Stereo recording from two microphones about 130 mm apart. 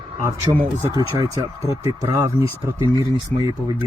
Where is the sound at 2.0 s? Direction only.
25° right (ahead or behind).